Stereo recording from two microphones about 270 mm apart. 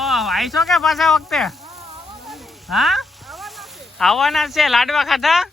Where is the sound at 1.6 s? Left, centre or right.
Right.